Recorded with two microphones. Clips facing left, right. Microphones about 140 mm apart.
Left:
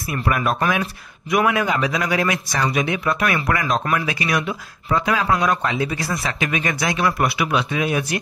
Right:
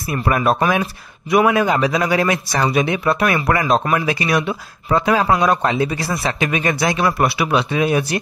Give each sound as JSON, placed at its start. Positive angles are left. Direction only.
{"t": 0.0, "sound": "speech", "side_deg": -35}